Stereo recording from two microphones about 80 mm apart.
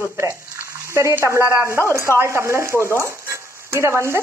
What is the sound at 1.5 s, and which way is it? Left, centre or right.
Speech, right.